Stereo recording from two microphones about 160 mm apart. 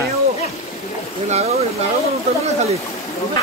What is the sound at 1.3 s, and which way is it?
Speech, 40° right (ahead or behind).